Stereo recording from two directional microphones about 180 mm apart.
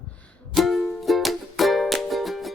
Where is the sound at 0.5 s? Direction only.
Centre (ahead or behind).